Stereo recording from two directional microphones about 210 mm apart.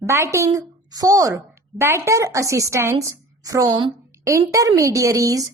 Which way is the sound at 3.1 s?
15° right (ahead or behind).